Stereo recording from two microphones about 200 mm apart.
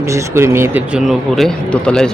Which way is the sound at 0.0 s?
15° right (ahead or behind).